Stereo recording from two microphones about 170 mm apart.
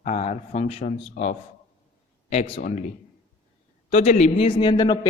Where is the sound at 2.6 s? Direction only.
45° left (ahead or behind).